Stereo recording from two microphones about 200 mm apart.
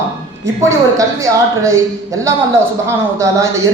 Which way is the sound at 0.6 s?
15° right (ahead or behind).